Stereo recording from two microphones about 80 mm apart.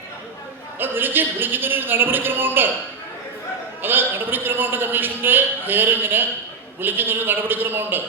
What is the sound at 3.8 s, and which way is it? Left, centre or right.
A man's voice, right.